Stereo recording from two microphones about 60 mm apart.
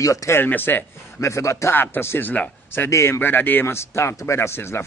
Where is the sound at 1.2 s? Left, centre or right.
Left.